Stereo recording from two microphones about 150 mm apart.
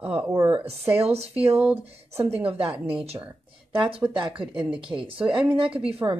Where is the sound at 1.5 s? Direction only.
10° right (ahead or behind).